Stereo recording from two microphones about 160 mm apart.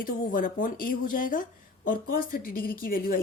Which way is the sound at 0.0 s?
60° left (ahead or behind).